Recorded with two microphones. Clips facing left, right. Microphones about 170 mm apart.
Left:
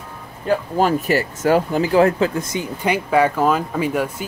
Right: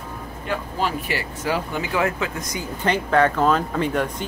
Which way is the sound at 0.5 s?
45° left (ahead or behind).